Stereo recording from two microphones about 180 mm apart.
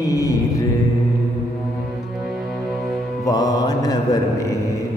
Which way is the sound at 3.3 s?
20° left (ahead or behind).